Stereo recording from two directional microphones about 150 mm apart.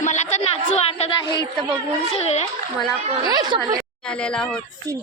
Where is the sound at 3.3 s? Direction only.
30° right (ahead or behind).